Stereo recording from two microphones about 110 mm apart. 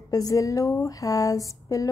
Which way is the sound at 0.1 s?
30° left (ahead or behind).